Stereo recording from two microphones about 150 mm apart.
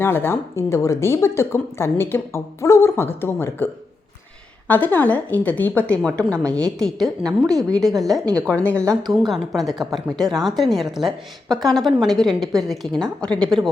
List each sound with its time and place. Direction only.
0.0 s speech: 15° left (ahead or behind)
4.7 s a woman's voice: 10° left (ahead or behind)